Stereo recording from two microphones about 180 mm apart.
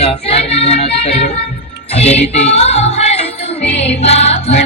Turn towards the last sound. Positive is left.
turn(degrees=35)  # may be behind; listen again after turning